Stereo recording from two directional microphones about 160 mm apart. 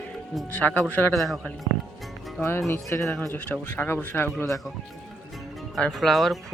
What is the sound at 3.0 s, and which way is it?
Speech, 5° left (ahead or behind).